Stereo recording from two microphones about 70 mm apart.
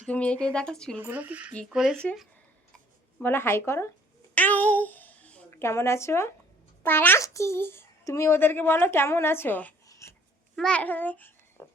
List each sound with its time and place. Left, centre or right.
0.1 s speech: centre
1.1 s speech: right
1.7 s speech: centre
3.2 s a woman's voice: left
4.4 s a sound: left
5.5 s a woman's voice: left
6.8 s a child's voice: left
7.2 s a woman's voice: left
9.8 s shuffling cards: left
10.7 s a child's voice: left